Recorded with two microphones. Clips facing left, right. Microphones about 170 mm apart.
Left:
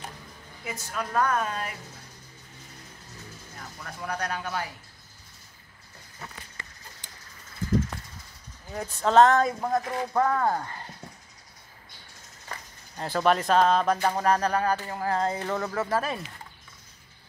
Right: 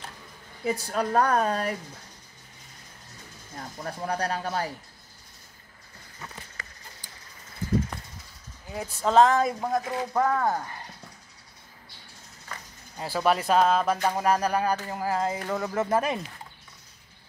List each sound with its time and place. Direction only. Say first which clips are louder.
0.7 s speech: right 7 dB; 35° right (ahead or behind)
3.5 s speech: right 7 dB; 35° right (ahead or behind)
9.0 s speech: left 1 dB; centre (ahead or behind)
12.9 s speech: left 1 dB; 5° right (ahead or behind)
15.7 s speech: right 3 dB; 20° right (ahead or behind)